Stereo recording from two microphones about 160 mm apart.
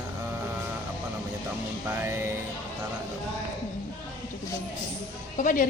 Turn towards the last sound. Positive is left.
turn(degrees=55)  # may be behind; listen again after turning